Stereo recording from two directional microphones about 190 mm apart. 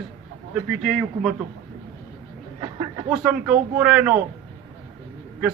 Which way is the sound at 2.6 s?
25° right (ahead or behind).